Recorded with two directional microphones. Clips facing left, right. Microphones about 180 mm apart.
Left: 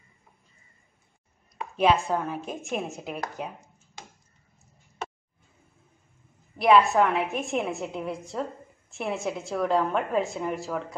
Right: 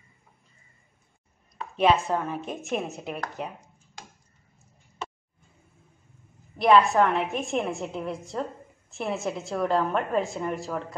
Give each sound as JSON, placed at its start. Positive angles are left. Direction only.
{"t": 1.8, "sound": "a woman's voice", "side_deg": 0}
{"t": 6.5, "sound": "a woman's voice", "side_deg": 0}